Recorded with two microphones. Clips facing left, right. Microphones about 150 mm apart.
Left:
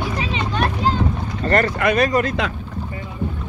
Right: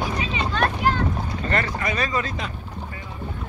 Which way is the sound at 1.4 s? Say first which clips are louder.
Left 9 dB; 50° left (ahead or behind).